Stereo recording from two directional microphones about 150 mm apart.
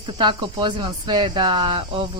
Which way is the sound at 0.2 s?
30° right (ahead or behind).